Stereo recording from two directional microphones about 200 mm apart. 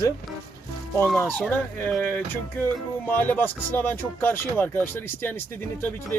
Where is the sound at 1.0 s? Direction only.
5° left (ahead or behind).